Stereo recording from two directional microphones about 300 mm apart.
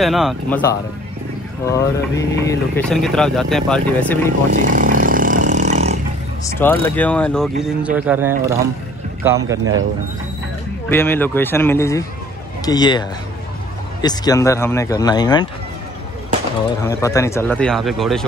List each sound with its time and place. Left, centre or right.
0.0 s speech: centre
1.7 s speech: centre
4.5 s vehicle: right
6.4 s speech: centre
10.9 s speech: centre
14.0 s speech: centre
16.8 s speech: centre